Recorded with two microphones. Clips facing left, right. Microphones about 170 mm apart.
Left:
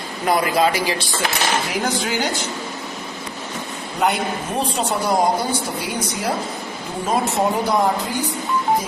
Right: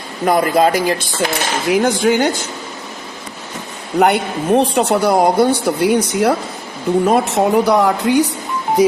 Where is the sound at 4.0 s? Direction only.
70° right (ahead or behind).